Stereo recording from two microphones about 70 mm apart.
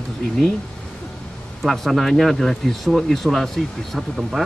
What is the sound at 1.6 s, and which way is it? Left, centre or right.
Speech, centre.